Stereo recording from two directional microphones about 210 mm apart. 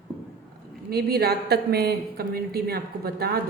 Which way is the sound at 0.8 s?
45° right (ahead or behind).